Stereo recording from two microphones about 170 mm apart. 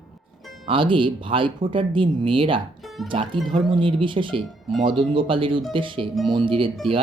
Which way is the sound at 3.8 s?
30° right (ahead or behind).